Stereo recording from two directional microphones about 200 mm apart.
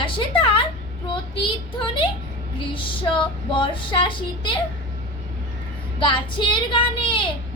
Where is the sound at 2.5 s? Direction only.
25° left (ahead or behind).